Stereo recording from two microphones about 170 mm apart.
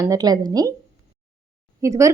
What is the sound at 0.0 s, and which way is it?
Speech, 20° right (ahead or behind).